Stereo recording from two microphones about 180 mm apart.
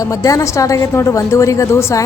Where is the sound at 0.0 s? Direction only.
20° left (ahead or behind).